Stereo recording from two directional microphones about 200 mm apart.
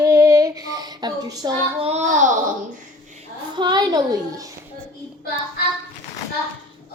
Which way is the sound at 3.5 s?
20° right (ahead or behind).